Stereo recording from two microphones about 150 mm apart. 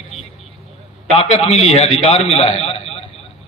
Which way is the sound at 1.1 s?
45° left (ahead or behind).